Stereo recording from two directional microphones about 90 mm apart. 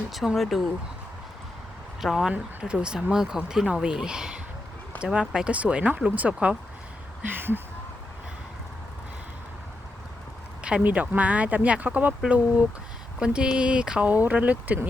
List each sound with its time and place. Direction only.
0.1 s speech: centre (ahead or behind)
2.0 s speech: 5° right (ahead or behind); by 7.6 s 25° right (ahead or behind)
10.6 s speech: 10° right (ahead or behind)
13.1 s speech: 10° right (ahead or behind)